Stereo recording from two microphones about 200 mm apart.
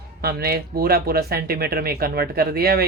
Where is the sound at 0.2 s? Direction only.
50° right (ahead or behind).